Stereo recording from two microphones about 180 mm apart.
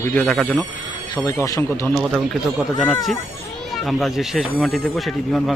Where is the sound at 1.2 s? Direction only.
20° left (ahead or behind).